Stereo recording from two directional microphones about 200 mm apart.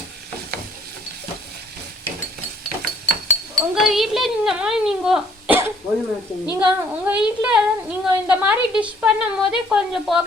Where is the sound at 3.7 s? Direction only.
Centre (ahead or behind).